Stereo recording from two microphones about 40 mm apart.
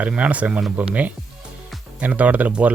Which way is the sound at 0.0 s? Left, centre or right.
Right.